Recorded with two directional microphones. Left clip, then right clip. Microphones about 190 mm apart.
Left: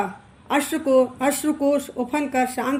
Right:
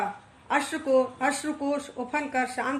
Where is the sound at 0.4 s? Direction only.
45° left (ahead or behind).